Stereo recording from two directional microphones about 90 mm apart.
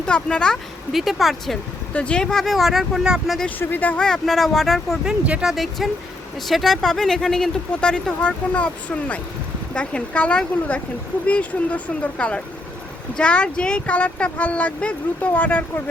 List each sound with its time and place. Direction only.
0.0 s speech: 10° left (ahead or behind)
1.9 s speech: 15° left (ahead or behind); by 3.3 s 5° right (ahead or behind)
3.6 s speech: 20° left (ahead or behind)
4.0 s speech: 5° left (ahead or behind)
5.0 s speech: 10° right (ahead or behind); by 15.6 s 20° left (ahead or behind)